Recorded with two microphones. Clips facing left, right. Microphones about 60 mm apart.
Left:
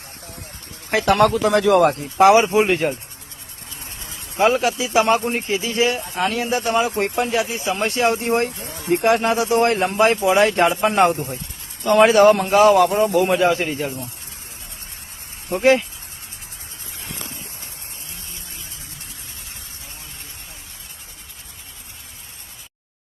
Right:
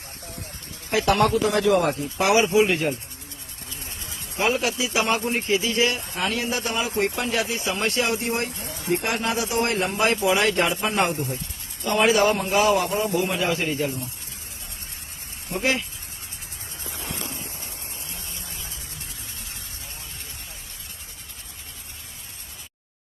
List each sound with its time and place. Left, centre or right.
0.4 s speech: left
2.1 s a man's voice: left
3.8 s a man's voice: left
7.2 s speech: left
10.8 s speech: left
11.8 s a man's voice: left
15.4 s a man's voice: left